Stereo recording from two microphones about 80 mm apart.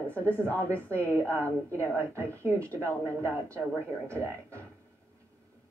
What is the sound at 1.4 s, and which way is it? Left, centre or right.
Speech, right.